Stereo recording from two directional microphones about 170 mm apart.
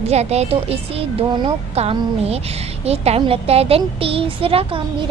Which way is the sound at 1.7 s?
35° right (ahead or behind).